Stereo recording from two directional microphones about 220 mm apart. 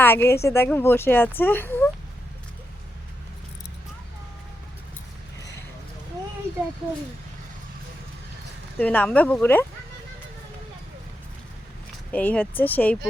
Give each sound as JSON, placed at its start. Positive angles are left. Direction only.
{"t": 0.0, "sound": "a woman's voice", "side_deg": 10}
{"t": 8.8, "sound": "speech", "side_deg": 5}
{"t": 12.1, "sound": "speech", "side_deg": 5}